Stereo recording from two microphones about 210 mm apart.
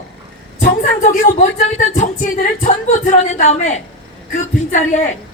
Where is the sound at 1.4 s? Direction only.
35° left (ahead or behind).